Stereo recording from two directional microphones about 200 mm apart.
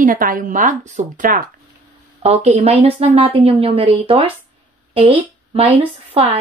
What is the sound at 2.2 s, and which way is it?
Speech, 10° right (ahead or behind).